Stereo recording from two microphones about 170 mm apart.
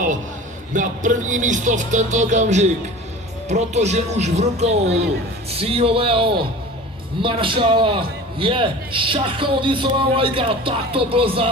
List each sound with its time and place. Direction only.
0.7 s a man's voice: 50° right (ahead or behind); by 11.4 s 30° right (ahead or behind)